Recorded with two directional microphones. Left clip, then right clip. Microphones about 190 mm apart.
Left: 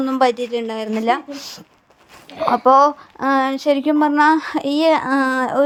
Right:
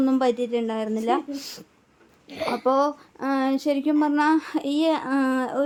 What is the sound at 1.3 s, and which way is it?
Speech, 10° left (ahead or behind).